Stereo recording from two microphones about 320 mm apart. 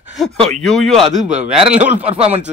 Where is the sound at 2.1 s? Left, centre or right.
Centre.